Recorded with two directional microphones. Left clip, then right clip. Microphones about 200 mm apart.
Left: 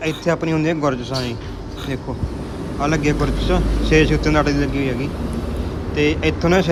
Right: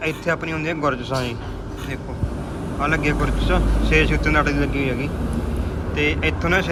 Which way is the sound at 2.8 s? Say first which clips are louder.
Left 2 dB; 20° left (ahead or behind).